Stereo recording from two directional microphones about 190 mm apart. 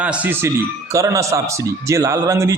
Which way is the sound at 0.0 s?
5° right (ahead or behind).